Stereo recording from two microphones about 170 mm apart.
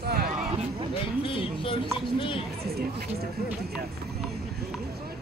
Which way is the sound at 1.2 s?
30° left (ahead or behind).